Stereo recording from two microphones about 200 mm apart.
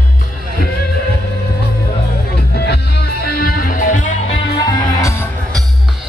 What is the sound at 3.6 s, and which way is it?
Music, 40° left (ahead or behind).